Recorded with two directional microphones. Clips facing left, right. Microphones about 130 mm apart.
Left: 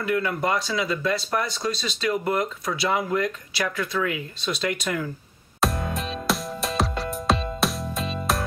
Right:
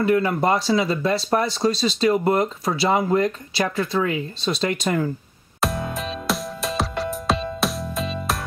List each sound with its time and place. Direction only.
0.0 s speech: 30° right (ahead or behind)
5.6 s music: centre (ahead or behind)